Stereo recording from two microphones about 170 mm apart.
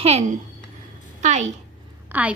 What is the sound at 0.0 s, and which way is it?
A woman's voice, 40° right (ahead or behind).